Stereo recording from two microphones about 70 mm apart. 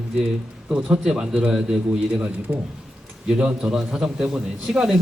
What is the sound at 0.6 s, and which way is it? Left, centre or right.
A man's voice, centre.